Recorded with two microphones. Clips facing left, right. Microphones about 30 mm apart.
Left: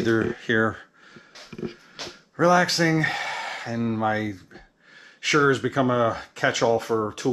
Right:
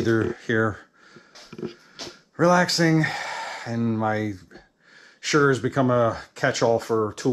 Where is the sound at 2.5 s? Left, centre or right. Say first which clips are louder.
Even; left.